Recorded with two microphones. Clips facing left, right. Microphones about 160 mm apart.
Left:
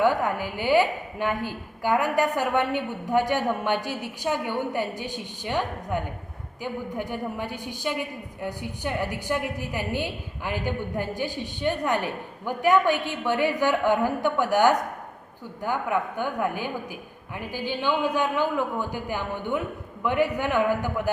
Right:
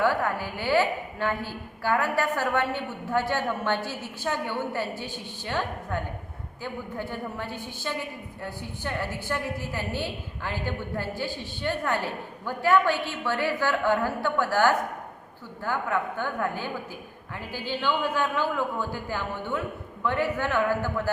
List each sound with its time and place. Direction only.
0.0 s a woman's voice: 20° left (ahead or behind)